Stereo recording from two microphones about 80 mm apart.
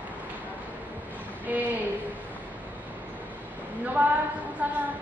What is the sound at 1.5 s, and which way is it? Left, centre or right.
Speech, right.